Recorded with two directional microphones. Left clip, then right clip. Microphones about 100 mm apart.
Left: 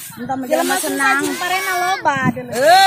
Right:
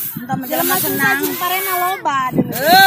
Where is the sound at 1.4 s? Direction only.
35° left (ahead or behind).